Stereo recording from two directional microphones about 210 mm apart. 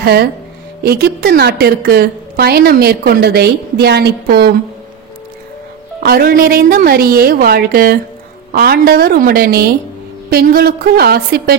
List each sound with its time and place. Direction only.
0.0 s a woman's voice: 50° right (ahead or behind)
6.0 s a woman's voice: 45° right (ahead or behind)